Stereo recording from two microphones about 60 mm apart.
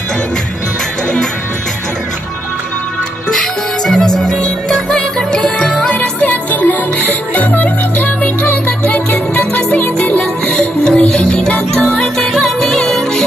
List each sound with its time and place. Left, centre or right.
3.3 s music: centre
5.9 s music: left; by 13.2 s centre